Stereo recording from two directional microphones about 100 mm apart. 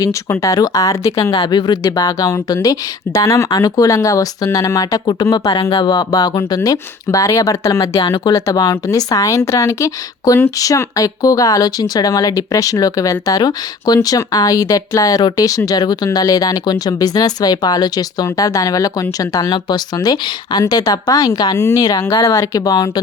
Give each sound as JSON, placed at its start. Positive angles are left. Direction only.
{"t": 0.0, "sound": "speech", "side_deg": 30}
{"t": 1.3, "sound": "speech", "side_deg": 45}
{"t": 1.8, "sound": "speech", "side_deg": 35}
{"t": 8.0, "sound": "speech", "side_deg": 50}